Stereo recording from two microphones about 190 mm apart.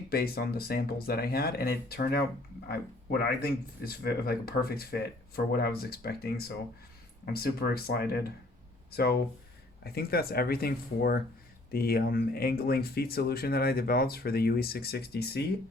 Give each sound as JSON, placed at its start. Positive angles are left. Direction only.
{"t": 0.1, "sound": "speech", "side_deg": 55}